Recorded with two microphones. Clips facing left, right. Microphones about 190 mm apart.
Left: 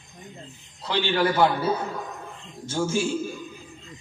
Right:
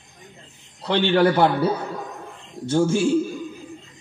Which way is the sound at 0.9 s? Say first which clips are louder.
Right 6 dB; 60° right (ahead or behind).